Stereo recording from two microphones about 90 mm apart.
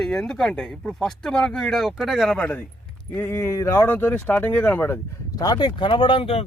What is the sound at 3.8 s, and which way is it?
Speech, 20° left (ahead or behind).